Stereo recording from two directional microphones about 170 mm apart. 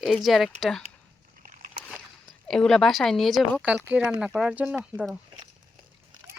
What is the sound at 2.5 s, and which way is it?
Speech, 5° left (ahead or behind).